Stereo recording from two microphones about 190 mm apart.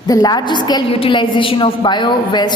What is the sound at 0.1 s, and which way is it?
A woman's voice, 20° left (ahead or behind).